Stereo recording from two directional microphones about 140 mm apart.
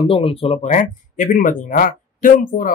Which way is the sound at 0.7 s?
65° left (ahead or behind).